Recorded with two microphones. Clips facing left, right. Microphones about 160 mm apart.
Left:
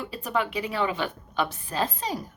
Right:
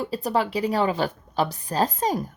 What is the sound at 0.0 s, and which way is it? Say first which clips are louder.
A woman's voice: right 4 dB; 35° right (ahead or behind).